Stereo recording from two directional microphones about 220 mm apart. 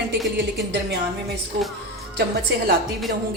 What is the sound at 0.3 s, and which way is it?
Speech, 50° right (ahead or behind).